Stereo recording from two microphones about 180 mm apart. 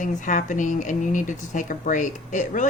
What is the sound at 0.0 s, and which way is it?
Speech, 45° left (ahead or behind).